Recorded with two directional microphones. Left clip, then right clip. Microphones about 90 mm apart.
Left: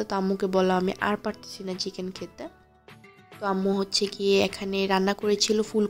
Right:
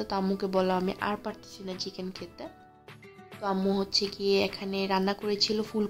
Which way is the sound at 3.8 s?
45° left (ahead or behind).